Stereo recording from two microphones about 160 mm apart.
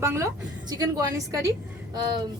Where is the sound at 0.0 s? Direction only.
15° right (ahead or behind).